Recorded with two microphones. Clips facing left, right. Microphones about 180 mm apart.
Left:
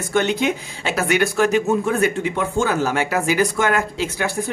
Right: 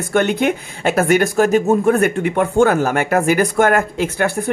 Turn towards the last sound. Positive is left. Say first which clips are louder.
# right 5 dB
turn(degrees=-55)  # may be behind; listen again after turning